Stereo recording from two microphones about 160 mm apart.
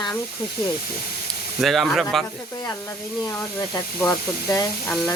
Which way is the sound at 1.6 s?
Centre (ahead or behind).